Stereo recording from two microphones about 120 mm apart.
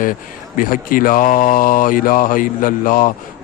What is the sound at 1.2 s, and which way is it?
Speech, 90° left.